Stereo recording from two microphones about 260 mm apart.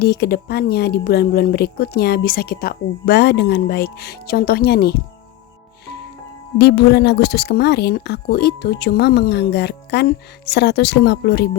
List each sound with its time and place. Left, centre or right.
0.0 s speech: left
6.6 s speech: left